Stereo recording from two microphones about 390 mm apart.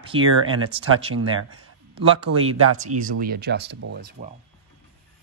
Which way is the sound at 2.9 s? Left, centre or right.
Right.